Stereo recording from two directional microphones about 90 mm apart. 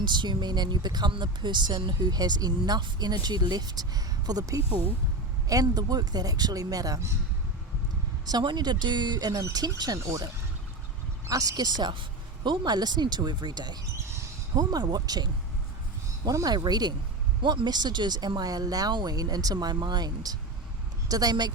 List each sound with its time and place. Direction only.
0.0 s speech: 55° right (ahead or behind); by 7.1 s 40° right (ahead or behind)
8.2 s speech: 50° right (ahead or behind)